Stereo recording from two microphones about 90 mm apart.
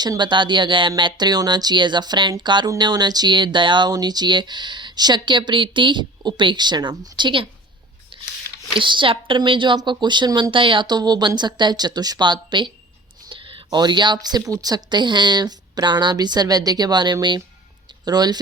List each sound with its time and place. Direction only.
0.0 s speech: 55° right (ahead or behind)
8.1 s a sound: 80° right
8.8 s speech: 65° right (ahead or behind)
10.5 s a woman's voice: 70° right (ahead or behind)
10.8 s speech: 50° right (ahead or behind)